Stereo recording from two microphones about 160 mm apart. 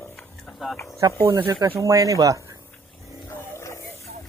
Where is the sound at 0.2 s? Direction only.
Centre (ahead or behind).